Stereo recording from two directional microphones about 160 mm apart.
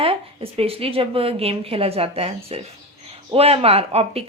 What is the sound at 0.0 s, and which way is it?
Speech, 35° right (ahead or behind).